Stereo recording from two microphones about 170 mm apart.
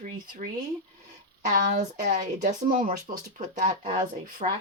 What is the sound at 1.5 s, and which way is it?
Speech, 50° right (ahead or behind).